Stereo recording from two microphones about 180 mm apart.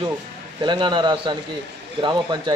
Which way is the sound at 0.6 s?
25° right (ahead or behind).